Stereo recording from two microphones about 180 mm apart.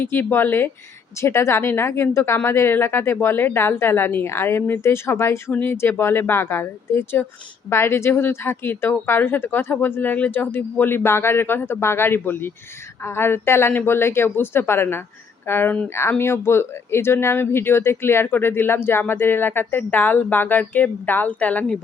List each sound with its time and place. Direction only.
0.0 s speech: 10° left (ahead or behind)